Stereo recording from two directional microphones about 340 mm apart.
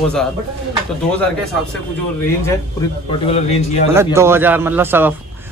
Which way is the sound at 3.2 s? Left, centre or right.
Centre.